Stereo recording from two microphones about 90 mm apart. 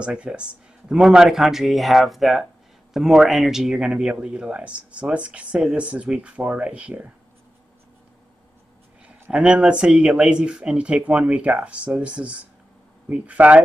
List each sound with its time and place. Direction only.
0.0 s speech: 10° right (ahead or behind)
9.0 s speech: 15° right (ahead or behind)